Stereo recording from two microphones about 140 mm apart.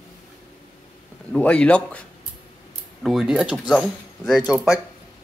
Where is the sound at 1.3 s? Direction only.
10° left (ahead or behind).